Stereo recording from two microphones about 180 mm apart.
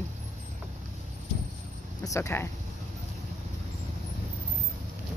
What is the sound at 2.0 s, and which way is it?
Speech, 15° left (ahead or behind).